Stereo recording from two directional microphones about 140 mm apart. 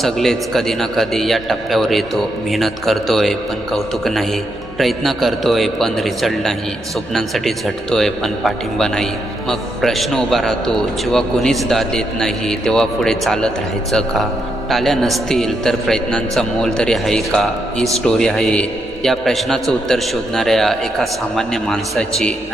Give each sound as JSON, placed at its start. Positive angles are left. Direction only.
{"t": 0.0, "sound": "a man's voice", "side_deg": 0}